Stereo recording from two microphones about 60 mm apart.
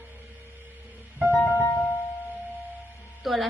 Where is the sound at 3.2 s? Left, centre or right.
Centre.